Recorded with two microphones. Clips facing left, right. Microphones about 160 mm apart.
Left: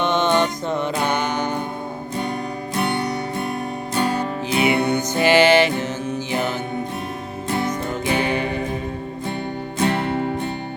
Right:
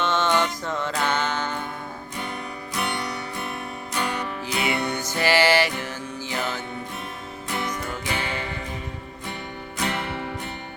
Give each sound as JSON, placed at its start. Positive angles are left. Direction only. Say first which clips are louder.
{"t": 0.0, "sound": "music", "louder": "left 4 dB", "side_deg": 15}
{"t": 2.7, "sound": "music", "louder": "left 6 dB", "side_deg": 30}
{"t": 7.7, "sound": "music", "louder": "left 7 dB", "side_deg": 20}
{"t": 9.7, "sound": "music", "louder": "left 8 dB", "side_deg": 30}